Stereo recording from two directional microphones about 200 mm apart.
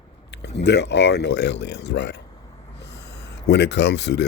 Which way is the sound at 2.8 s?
60° left (ahead or behind).